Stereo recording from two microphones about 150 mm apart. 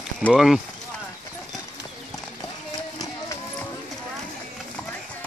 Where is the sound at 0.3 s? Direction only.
Centre (ahead or behind).